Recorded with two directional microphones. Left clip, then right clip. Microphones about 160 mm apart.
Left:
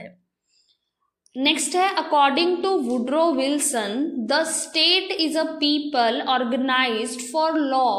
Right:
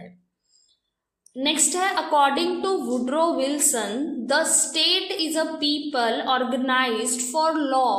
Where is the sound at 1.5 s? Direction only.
30° left (ahead or behind).